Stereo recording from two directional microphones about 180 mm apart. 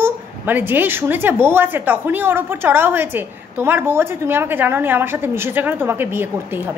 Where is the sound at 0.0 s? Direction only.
10° right (ahead or behind).